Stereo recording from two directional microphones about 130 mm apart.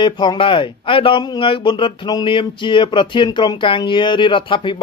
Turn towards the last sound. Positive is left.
turn(degrees=40)  # may be behind; listen again after turning